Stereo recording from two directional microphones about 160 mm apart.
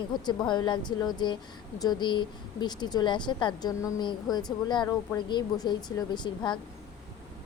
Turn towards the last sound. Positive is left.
turn(degrees=30)  # may be behind; listen again after turning